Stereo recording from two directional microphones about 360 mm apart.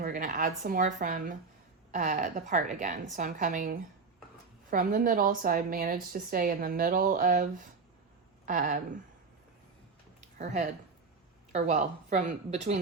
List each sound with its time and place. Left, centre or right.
0.0 s a woman's voice: right
10.3 s a woman's voice: centre